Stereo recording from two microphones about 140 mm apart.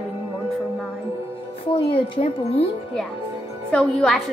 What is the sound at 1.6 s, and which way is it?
A woman's voice, 40° left (ahead or behind).